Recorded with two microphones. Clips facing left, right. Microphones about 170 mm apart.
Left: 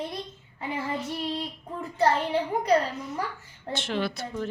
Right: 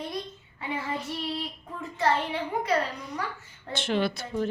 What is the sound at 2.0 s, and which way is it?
Speech, 35° left (ahead or behind).